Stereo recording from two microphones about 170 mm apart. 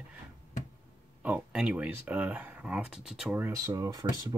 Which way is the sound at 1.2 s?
5° right (ahead or behind).